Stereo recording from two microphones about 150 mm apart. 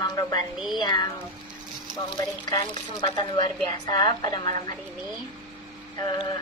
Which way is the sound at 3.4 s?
30° left (ahead or behind).